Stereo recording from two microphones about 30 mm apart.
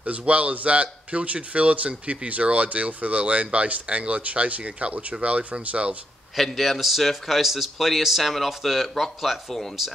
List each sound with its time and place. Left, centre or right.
0.0 s speech: right
6.3 s speech: centre
7.2 s speech: centre
9.8 s speech: centre